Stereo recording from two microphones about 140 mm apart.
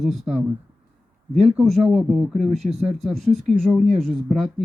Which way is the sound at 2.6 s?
50° right (ahead or behind).